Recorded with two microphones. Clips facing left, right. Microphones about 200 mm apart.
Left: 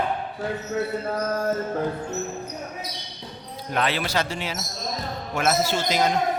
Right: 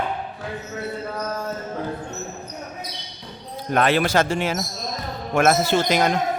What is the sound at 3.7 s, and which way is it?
Speech, 50° right (ahead or behind).